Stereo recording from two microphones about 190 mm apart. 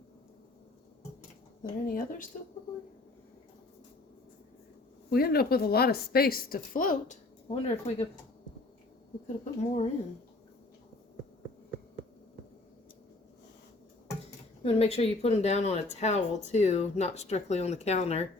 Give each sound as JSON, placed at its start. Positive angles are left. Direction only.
{"t": 1.9, "sound": "a woman's voice", "side_deg": 50}
{"t": 5.1, "sound": "a woman's voice", "side_deg": 55}
{"t": 9.2, "sound": "speech", "side_deg": 40}
{"t": 14.6, "sound": "speech", "side_deg": 30}